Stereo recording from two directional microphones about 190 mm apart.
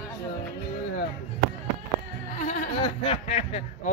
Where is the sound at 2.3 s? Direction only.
40° left (ahead or behind).